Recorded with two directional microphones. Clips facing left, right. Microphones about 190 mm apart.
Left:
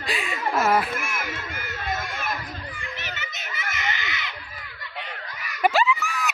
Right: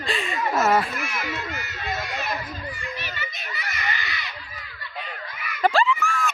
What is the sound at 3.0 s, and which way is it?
Children playing, 20° left (ahead or behind).